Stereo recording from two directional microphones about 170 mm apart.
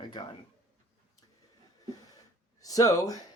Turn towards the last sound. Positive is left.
turn(degrees=20)  # may be behind; listen again after turning